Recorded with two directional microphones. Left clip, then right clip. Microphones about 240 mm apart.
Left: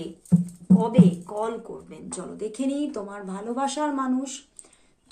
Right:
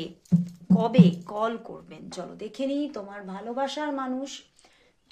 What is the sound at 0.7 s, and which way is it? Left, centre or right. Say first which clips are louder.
Speech: left 1 dB; right.